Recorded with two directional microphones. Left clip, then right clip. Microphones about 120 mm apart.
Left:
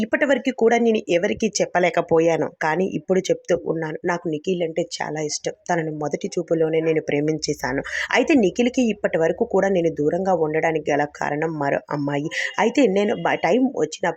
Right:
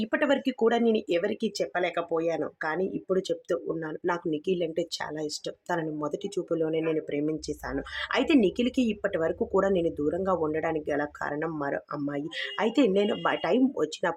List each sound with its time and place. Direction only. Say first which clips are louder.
0.0 s speech: left 6 dB; 30° left (ahead or behind)
4.0 s speech: left 3 dB; 25° left (ahead or behind)
5.1 s speech: left 8 dB; 30° left (ahead or behind)
7.1 s speech: left 8 dB; 50° left (ahead or behind)
8.2 s speech: left 5 dB; 30° left (ahead or behind)